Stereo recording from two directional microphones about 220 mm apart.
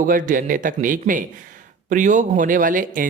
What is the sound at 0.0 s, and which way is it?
Speech, 35° right (ahead or behind).